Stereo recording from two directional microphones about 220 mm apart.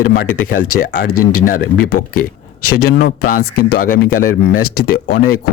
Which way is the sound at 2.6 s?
90° left.